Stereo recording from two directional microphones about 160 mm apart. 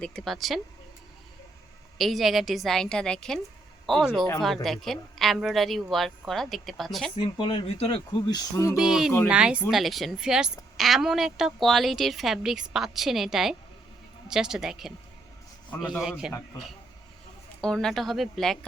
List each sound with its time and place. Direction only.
0.0 s a woman's voice: 5° left (ahead or behind)
2.0 s a woman's voice: centre (ahead or behind)
7.2 s speech: 30° left (ahead or behind)
8.7 s a woman's voice: 5° right (ahead or behind)
16.0 s a woman's voice: 5° right (ahead or behind)
17.6 s a woman's voice: 5° left (ahead or behind)